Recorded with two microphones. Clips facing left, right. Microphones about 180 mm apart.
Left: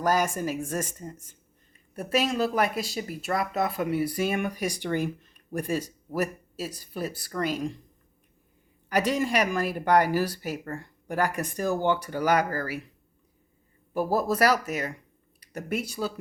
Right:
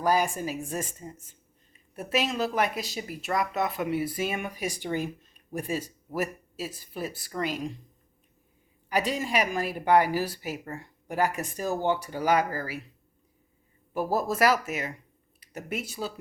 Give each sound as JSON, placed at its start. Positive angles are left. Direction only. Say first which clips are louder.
{"t": 0.0, "sound": "speech", "louder": "left 1 dB", "side_deg": 45}
{"t": 8.9, "sound": "speech", "louder": "left 3 dB", "side_deg": 45}
{"t": 13.9, "sound": "speech", "louder": "left 2 dB", "side_deg": 45}